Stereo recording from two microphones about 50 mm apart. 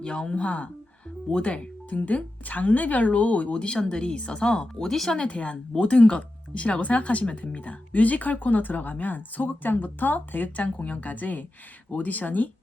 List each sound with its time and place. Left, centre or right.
0.0 s a woman's voice: centre
5.2 s speech: left